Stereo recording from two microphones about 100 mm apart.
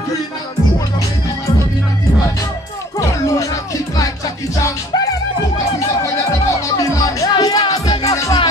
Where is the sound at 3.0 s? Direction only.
35° left (ahead or behind).